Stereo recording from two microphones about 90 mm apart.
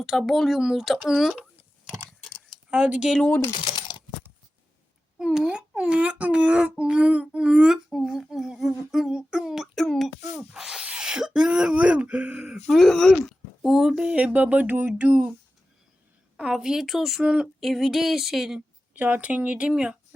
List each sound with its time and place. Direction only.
0.0 s speech: centre (ahead or behind)
1.4 s a sound: 10° right (ahead or behind)
2.2 s keys jangling: 5° left (ahead or behind)
2.6 s speech: 15° right (ahead or behind)
3.6 s a sound: 60° left (ahead or behind)
5.2 s speech: 5° right (ahead or behind)
10.3 s speech: 10° right (ahead or behind)
16.4 s speech: 5° right (ahead or behind)
18.9 s speech: 20° right (ahead or behind)